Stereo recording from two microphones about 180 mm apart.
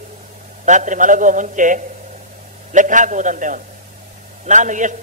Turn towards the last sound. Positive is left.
turn(degrees=-45)  # may be behind; listen again after turning